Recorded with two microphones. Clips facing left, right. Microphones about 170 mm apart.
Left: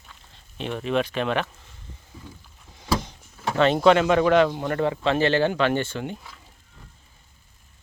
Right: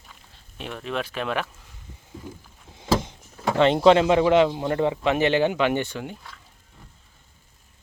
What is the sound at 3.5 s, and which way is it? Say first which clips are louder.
Speech: right 1 dB; 20° right (ahead or behind).